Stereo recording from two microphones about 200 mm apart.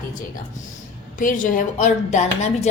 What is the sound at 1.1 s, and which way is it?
Speech, 40° left (ahead or behind).